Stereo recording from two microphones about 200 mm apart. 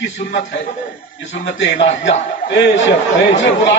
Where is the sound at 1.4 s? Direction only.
60° left (ahead or behind).